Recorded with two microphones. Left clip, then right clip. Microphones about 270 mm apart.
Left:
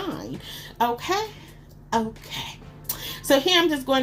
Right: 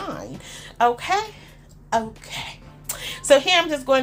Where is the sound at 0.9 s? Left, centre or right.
Right.